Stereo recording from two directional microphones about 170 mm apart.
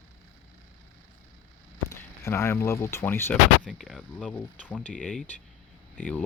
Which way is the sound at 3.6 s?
Centre (ahead or behind).